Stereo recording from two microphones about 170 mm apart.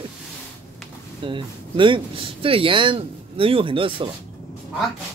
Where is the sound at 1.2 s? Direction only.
30° right (ahead or behind).